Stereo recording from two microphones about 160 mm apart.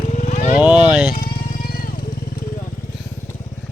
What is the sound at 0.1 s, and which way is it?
Vehicle, 45° left (ahead or behind).